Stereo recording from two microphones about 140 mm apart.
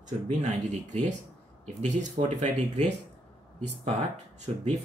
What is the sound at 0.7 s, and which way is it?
Speech, 60° right (ahead or behind).